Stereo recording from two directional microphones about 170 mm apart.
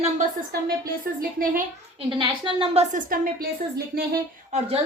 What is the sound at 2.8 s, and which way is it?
A woman's voice, 55° right (ahead or behind).